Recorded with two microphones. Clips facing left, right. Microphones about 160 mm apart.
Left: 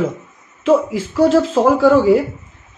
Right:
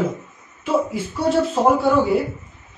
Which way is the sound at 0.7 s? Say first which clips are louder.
Left 6 dB; 90° left.